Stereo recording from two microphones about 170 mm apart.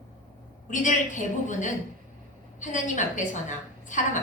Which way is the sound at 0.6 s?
45° left (ahead or behind).